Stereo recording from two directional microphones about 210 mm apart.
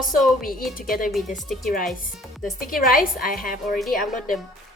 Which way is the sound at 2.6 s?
40° left (ahead or behind).